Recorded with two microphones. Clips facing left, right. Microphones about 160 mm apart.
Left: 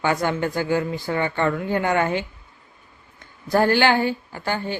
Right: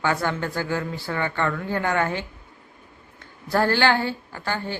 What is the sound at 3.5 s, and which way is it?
Speech, 15° left (ahead or behind).